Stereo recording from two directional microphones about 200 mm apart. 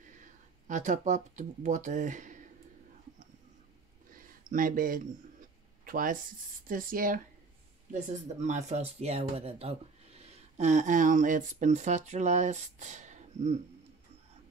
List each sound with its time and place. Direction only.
0.2 s speech: 40° right (ahead or behind)
4.1 s a sound: 45° right (ahead or behind)
5.9 s speech: 45° right (ahead or behind)